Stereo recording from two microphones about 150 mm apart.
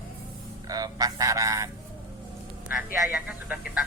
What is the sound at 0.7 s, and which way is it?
Goose, 25° right (ahead or behind).